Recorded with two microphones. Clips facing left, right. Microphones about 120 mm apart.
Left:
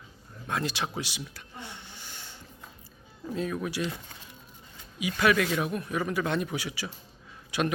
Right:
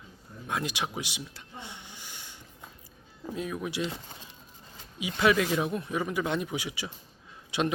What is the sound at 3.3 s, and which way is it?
Speech, 15° right (ahead or behind).